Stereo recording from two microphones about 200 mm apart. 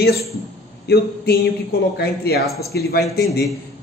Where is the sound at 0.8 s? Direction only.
55° left (ahead or behind).